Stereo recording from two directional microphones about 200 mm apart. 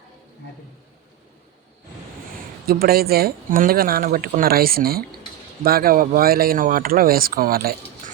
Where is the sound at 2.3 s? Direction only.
50° right (ahead or behind).